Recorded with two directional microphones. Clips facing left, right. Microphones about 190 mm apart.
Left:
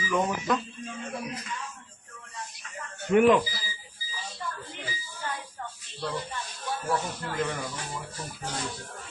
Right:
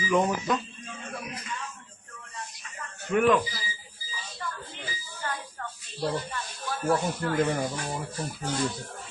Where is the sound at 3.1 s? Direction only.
20° left (ahead or behind).